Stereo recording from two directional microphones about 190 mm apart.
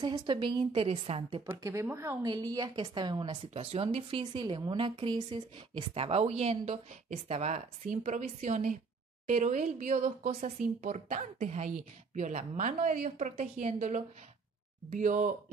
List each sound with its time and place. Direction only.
0.0 s a woman's voice: 25° right (ahead or behind)
1.6 s a woman's voice: 15° right (ahead or behind); by 15.3 s 40° right (ahead or behind)